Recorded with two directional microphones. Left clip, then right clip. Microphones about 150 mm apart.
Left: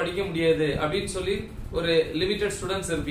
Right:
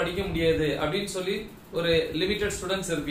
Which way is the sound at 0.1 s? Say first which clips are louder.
Left 2 dB; 15° left (ahead or behind).